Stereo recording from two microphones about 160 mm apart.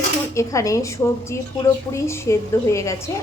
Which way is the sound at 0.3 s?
20° left (ahead or behind).